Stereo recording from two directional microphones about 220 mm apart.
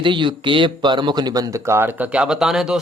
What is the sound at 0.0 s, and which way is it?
A man's voice, 20° right (ahead or behind).